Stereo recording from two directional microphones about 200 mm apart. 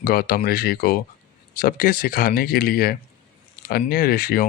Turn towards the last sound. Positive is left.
turn(degrees=45)  # may be behind; listen again after turning